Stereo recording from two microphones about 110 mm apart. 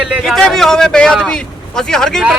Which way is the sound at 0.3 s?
5° left (ahead or behind).